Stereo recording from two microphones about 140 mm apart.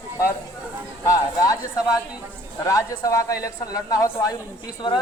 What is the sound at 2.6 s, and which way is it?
A man's voice, 25° left (ahead or behind).